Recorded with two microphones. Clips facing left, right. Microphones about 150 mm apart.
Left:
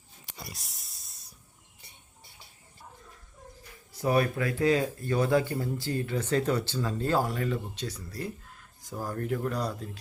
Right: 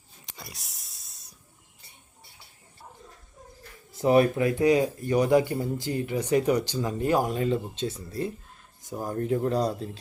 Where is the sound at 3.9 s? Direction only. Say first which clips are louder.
Right 6 dB; 20° right (ahead or behind).